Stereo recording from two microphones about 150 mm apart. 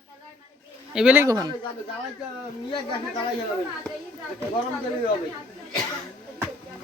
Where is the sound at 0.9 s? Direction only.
10° right (ahead or behind).